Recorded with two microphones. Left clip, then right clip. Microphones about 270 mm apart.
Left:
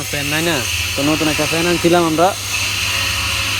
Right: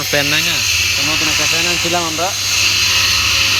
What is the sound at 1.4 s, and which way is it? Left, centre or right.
Speech, left.